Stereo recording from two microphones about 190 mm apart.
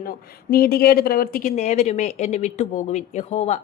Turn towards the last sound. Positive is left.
turn(degrees=35)  # may be behind; listen again after turning